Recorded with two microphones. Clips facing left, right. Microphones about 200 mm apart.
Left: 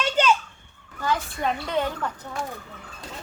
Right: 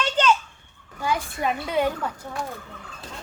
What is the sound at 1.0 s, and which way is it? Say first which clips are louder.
Speech: even; 10° right (ahead or behind).